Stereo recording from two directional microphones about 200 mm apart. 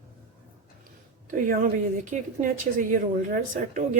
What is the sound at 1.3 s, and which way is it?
A woman's voice, 40° right (ahead or behind).